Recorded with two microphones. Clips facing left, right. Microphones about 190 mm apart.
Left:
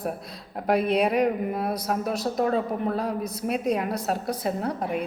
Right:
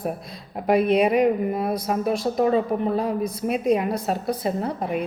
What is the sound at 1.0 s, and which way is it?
A woman's voice, centre (ahead or behind).